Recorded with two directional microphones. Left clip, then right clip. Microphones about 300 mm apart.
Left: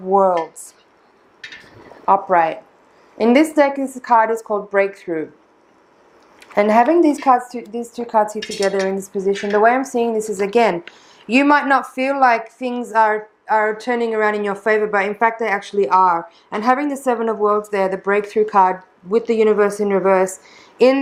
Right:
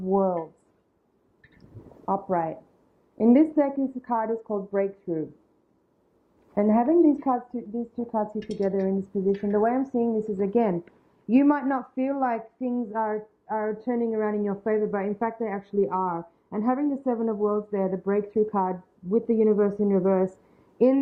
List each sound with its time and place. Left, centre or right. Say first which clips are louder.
0.0 s speech: left 10 dB; centre
1.4 s a sound: left 17 dB; centre
3.2 s speech: left 7 dB; centre
6.5 s speech: left 9 dB; centre
7.6 s a woman's voice: left 7 dB; left
7.9 s speech: left 12 dB; centre